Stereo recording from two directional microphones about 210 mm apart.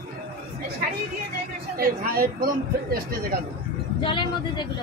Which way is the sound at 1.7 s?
45° right (ahead or behind).